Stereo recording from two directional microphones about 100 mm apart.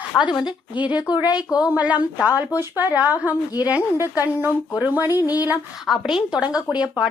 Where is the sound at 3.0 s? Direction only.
15° right (ahead or behind).